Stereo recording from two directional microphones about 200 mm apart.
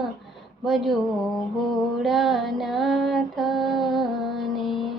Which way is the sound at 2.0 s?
Centre (ahead or behind).